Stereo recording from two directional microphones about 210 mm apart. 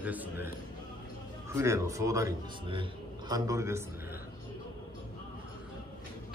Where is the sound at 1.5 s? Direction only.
15° right (ahead or behind).